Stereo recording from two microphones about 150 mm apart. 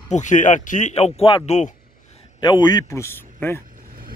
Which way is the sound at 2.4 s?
30° left (ahead or behind).